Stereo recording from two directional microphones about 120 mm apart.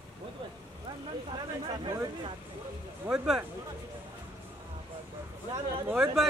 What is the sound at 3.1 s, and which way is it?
Speech, 10° right (ahead or behind).